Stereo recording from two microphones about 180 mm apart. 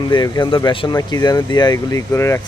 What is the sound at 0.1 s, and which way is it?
Speech, 25° left (ahead or behind).